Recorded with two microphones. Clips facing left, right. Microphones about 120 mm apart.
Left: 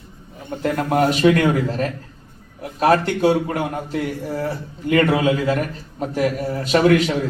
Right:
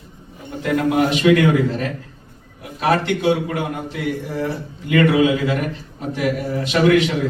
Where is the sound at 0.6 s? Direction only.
40° left (ahead or behind).